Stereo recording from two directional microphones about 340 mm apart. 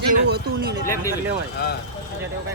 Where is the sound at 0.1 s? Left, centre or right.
Right.